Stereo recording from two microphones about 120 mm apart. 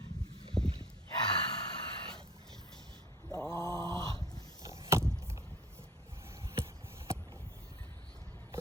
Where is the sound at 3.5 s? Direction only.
30° left (ahead or behind).